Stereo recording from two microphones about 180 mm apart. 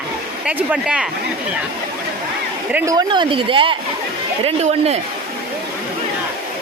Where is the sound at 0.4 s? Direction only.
5° right (ahead or behind).